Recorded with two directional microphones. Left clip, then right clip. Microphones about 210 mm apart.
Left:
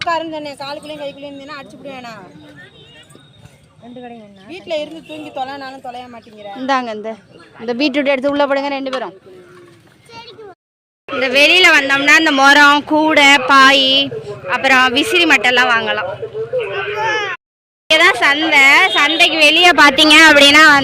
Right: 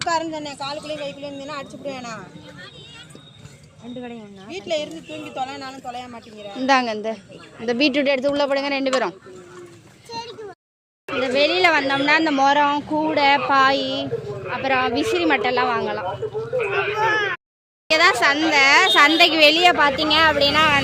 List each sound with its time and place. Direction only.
0.1 s a woman's voice: 45° left (ahead or behind)
4.4 s a woman's voice: 50° left (ahead or behind)
6.6 s speech: 5° left (ahead or behind)
8.8 s speech: 5° right (ahead or behind)
11.2 s speech: centre (ahead or behind)
12.5 s speech: 10° left (ahead or behind)
16.7 s bleat: 35° right (ahead or behind)
17.9 s speech: centre (ahead or behind)
19.4 s speech: centre (ahead or behind)
19.7 s speech: 20° left (ahead or behind)